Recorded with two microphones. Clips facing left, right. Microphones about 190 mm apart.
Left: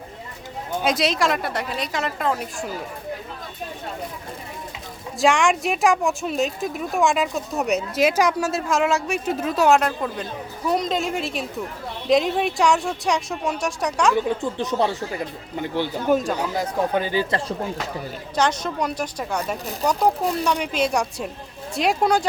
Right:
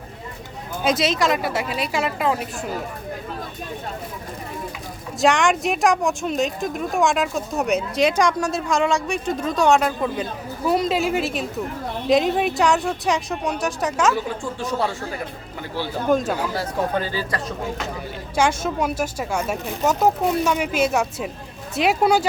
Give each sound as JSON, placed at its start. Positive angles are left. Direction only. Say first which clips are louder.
{"t": 0.8, "sound": "speech", "louder": "right 1 dB", "side_deg": 0}
{"t": 5.2, "sound": "speech", "louder": "right 1 dB", "side_deg": 0}
{"t": 14.6, "sound": "speech", "louder": "even", "side_deg": 20}
{"t": 16.1, "sound": "speech", "louder": "right 1 dB", "side_deg": 10}
{"t": 18.3, "sound": "speech", "louder": "right 2 dB", "side_deg": -10}